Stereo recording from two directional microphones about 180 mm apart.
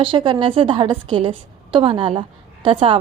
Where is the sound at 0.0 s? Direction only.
30° right (ahead or behind).